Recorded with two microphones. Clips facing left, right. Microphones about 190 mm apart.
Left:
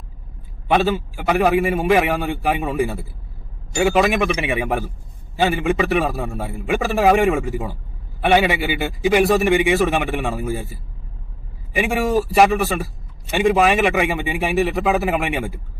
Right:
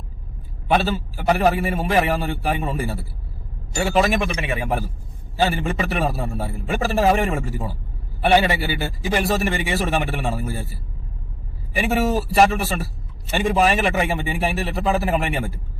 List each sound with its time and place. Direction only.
0.8 s a man's voice: 15° left (ahead or behind)